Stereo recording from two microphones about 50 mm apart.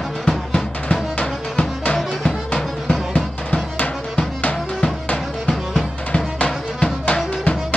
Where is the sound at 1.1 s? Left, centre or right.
Left.